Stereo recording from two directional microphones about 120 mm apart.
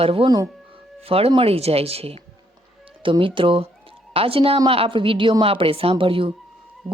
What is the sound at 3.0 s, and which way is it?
Speech, 45° right (ahead or behind).